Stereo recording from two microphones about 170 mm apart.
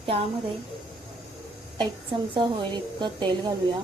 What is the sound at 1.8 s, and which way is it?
A woman's voice, 30° right (ahead or behind).